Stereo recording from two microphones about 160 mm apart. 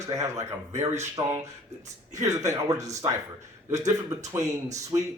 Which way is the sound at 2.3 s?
20° right (ahead or behind).